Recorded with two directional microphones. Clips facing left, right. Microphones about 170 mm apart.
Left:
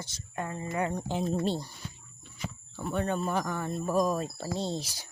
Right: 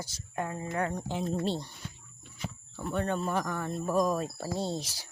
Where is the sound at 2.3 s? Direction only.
Centre (ahead or behind).